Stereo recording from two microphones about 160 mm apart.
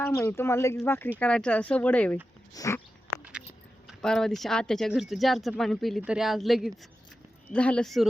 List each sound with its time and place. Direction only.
0.0 s speech: 15° left (ahead or behind)
2.5 s a sound: 20° left (ahead or behind)
3.8 s speech: 5° left (ahead or behind)